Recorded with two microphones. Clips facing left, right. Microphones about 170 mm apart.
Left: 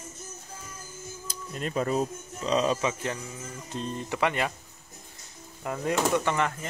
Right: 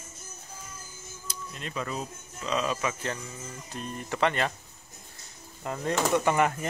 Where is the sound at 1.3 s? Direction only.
45° left (ahead or behind); by 4.0 s 25° left (ahead or behind).